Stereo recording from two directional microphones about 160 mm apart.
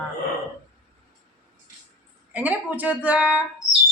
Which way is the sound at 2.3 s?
10° right (ahead or behind).